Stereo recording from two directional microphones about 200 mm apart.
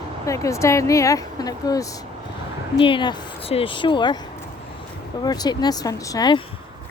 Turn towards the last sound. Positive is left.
turn(degrees=20)  # may be behind; listen again after turning